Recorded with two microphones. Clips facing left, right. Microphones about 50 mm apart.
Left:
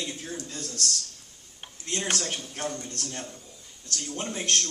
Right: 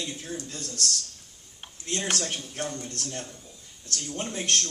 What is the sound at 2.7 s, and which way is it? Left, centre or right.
A man's voice, centre.